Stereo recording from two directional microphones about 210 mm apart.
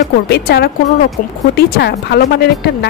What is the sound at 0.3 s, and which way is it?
Speech, 50° left (ahead or behind).